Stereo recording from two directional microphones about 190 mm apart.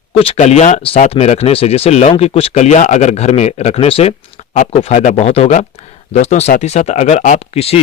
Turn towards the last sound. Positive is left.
turn(degrees=30)  # may be behind; listen again after turning